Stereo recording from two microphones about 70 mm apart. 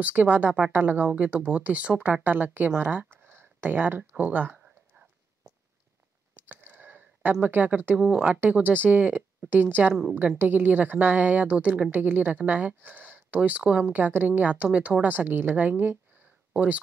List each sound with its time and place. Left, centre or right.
0.0 s speech: right
6.3 s clicking: right
7.4 s speech: right